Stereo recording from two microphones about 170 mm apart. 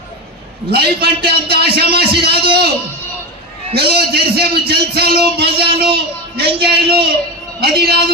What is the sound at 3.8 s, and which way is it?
A man's voice, 70° right (ahead or behind).